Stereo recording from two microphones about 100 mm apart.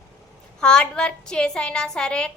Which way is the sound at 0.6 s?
10° left (ahead or behind).